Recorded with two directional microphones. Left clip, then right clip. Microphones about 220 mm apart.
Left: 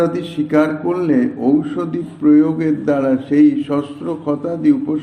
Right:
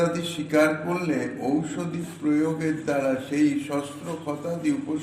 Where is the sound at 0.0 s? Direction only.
25° left (ahead or behind).